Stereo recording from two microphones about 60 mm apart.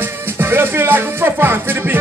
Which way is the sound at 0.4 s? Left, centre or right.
Right.